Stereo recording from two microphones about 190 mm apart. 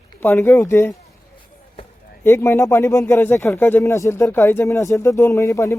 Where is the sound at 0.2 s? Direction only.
10° left (ahead or behind).